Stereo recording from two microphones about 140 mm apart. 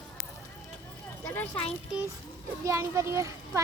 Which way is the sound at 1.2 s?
10° left (ahead or behind).